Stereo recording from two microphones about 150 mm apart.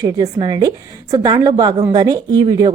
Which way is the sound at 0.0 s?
25° right (ahead or behind).